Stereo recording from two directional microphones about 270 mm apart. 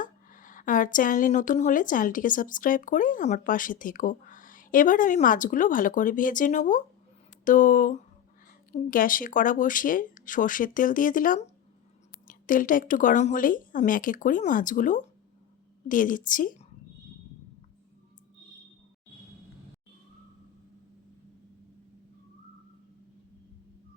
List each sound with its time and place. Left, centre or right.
0.0 s a woman's voice: left